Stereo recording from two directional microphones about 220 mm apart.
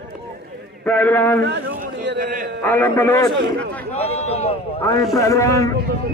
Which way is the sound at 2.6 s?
10° left (ahead or behind).